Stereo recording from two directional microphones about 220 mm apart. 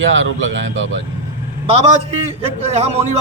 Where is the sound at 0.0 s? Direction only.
60° right (ahead or behind).